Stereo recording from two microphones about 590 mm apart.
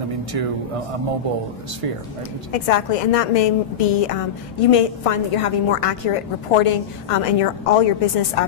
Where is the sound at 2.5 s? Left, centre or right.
Left.